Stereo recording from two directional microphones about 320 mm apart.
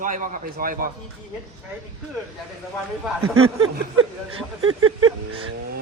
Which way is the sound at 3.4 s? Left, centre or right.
Right.